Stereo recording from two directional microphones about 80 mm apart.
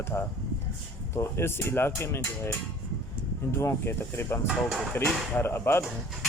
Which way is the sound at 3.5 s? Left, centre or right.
Left.